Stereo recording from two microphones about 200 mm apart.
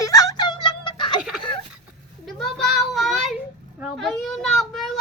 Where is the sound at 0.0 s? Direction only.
15° left (ahead or behind).